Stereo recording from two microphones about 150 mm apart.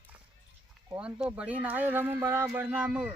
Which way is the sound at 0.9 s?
5° right (ahead or behind).